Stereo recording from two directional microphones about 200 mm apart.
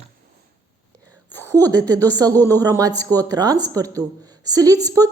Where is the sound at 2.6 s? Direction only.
15° right (ahead or behind).